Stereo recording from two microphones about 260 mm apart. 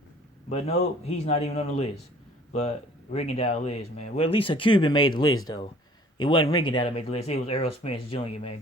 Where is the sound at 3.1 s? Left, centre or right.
Left.